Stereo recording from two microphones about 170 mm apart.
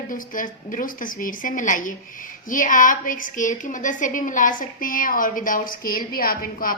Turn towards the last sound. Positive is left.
turn(degrees=55)  # may be behind; listen again after turning